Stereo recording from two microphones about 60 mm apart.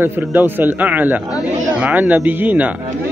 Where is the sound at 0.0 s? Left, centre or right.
Right.